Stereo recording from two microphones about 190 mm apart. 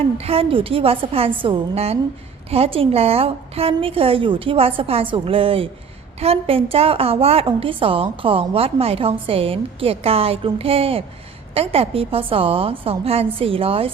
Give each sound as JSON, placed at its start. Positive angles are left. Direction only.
{"t": 0.2, "sound": "a woman's voice", "side_deg": -30}